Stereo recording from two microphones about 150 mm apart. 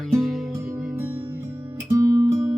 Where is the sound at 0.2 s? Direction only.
Centre (ahead or behind).